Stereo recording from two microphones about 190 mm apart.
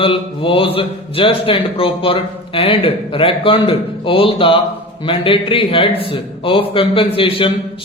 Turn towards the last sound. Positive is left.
turn(degrees=30)  # may be behind; listen again after turning